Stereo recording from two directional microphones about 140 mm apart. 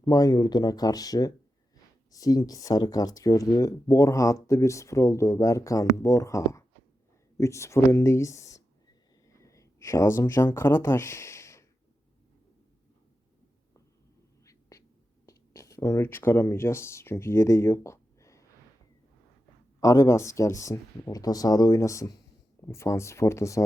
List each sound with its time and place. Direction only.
0.0 s speech: 25° left (ahead or behind)
14.4 s a sound: 25° left (ahead or behind)
15.3 s speech: 20° left (ahead or behind)
19.8 s speech: 25° left (ahead or behind)